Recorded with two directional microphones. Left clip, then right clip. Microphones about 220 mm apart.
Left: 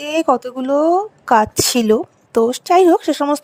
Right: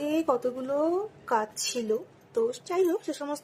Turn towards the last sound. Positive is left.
turn(degrees=45)  # may be behind; listen again after turning